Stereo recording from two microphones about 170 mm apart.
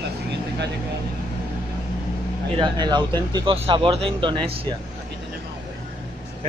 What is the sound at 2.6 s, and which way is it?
Speech, 25° right (ahead or behind).